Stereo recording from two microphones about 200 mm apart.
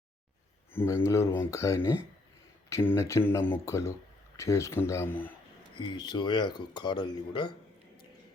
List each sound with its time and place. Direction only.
0.7 s speech: 10° left (ahead or behind)
5.7 s speech: 25° left (ahead or behind)